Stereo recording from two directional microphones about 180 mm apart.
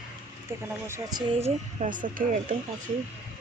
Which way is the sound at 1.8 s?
50° right (ahead or behind).